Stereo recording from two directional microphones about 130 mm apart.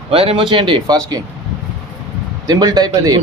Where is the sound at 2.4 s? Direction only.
30° right (ahead or behind).